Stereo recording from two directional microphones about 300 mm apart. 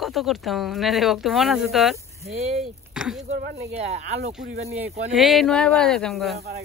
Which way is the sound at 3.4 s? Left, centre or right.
Right.